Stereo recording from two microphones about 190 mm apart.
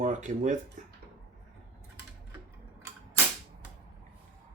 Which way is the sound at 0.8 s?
45° right (ahead or behind).